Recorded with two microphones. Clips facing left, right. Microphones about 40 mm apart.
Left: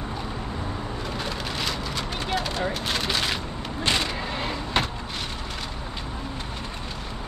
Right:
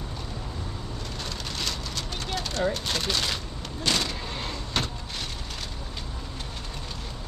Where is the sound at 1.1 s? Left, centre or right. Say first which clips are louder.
Left 4 dB; centre.